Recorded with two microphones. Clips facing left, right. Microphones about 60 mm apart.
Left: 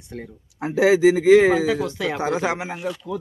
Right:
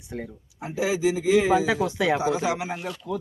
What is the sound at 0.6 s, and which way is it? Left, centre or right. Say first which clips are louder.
A man's voice: left 8 dB; left.